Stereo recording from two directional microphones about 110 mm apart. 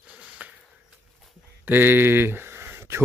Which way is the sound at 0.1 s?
10° right (ahead or behind).